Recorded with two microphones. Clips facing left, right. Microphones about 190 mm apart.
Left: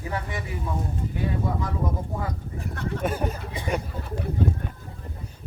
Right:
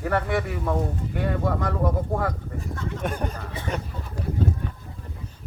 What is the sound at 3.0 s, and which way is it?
Speech, 5° left (ahead or behind).